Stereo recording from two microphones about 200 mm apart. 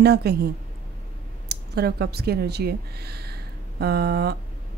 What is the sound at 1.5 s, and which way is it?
Speech, 55° right (ahead or behind).